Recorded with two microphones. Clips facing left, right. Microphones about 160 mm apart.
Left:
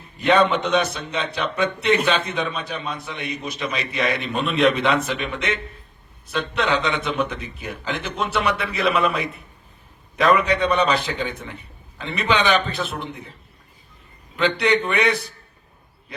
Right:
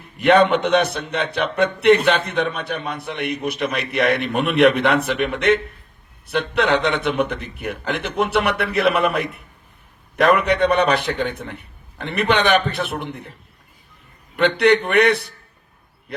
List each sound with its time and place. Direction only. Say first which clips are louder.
0.2 s a man's voice: right 3 dB; 60° right (ahead or behind)
14.3 s a man's voice: right 4 dB; 60° right (ahead or behind)